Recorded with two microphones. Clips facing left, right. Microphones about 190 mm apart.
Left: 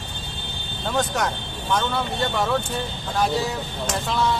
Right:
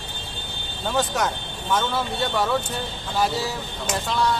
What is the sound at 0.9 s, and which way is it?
Speech, centre (ahead or behind).